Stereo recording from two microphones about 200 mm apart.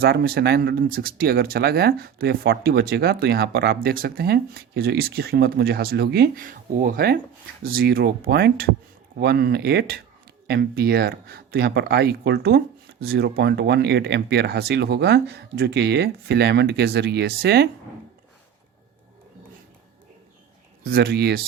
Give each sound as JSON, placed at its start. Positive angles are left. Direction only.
{"t": 0.0, "sound": "speech", "side_deg": -50}
{"t": 20.8, "sound": "speech", "side_deg": -50}